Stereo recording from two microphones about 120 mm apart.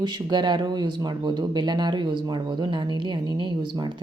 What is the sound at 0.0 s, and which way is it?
Speech, 40° right (ahead or behind).